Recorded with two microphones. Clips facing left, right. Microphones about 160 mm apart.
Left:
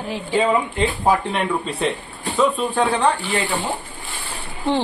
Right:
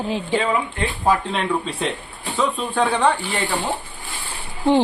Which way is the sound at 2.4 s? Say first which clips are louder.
Left 2 dB; 5° left (ahead or behind).